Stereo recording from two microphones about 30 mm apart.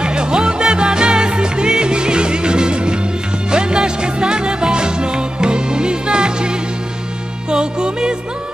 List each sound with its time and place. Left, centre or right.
0.0 s music: right
7.5 s music: right